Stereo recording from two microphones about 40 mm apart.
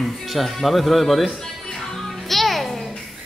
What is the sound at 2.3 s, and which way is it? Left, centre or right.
Music, centre.